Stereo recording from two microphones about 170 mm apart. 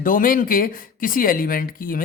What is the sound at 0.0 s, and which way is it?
Speech, 55° left (ahead or behind).